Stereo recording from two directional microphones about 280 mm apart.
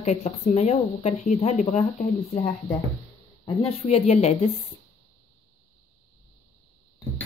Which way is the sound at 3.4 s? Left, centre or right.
Left.